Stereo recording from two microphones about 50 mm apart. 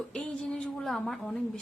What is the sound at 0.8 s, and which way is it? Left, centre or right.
Speech, centre.